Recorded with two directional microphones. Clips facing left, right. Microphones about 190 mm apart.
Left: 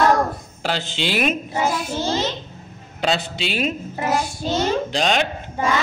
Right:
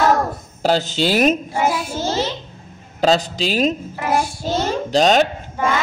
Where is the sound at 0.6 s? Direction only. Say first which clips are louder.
Right 8 dB; 40° right (ahead or behind).